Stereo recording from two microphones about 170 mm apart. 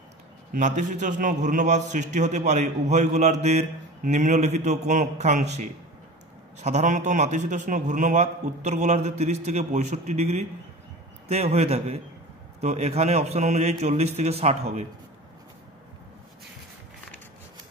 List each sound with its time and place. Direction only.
0.5 s a man's voice: 45° right (ahead or behind)